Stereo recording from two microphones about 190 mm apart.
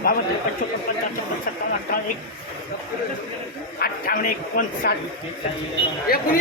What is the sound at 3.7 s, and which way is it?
Speech, 50° left (ahead or behind).